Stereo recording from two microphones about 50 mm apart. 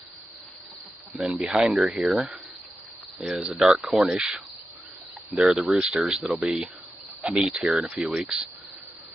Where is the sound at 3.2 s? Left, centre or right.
Centre.